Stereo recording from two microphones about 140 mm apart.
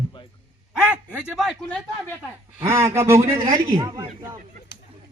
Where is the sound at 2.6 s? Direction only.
15° right (ahead or behind).